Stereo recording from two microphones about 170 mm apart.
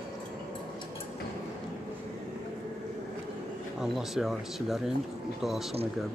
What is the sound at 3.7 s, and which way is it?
Speech, centre (ahead or behind).